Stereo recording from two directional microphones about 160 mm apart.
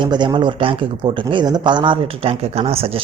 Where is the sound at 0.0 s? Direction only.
30° right (ahead or behind).